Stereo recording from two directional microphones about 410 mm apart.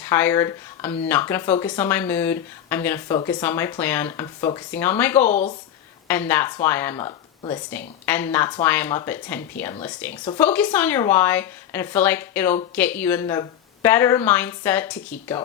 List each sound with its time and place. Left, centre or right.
0.0 s speech: centre
5.3 s speech: centre
6.1 s speech: centre